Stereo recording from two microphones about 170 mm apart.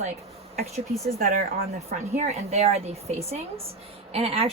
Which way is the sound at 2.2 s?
40° right (ahead or behind).